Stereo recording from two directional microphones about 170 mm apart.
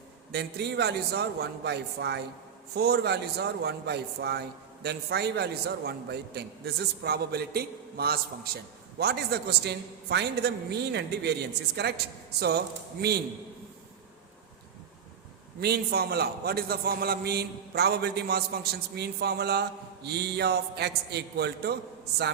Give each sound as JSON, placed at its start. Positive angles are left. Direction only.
{"t": 0.3, "sound": "a man's voice", "side_deg": -75}
{"t": 9.0, "sound": "a man's voice", "side_deg": -75}
{"t": 15.6, "sound": "a man's voice", "side_deg": -70}